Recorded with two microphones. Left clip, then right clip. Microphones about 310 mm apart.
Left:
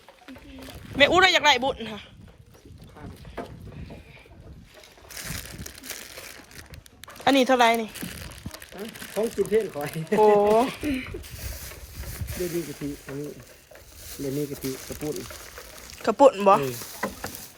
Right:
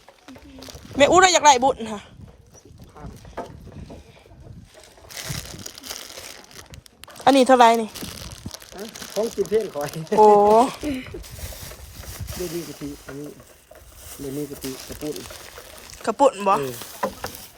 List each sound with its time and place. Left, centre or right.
0.9 s speech: right
5.0 s crushing: centre
7.3 s speech: centre
12.1 s a sound: centre
16.0 s speech: centre
17.0 s rowboat: centre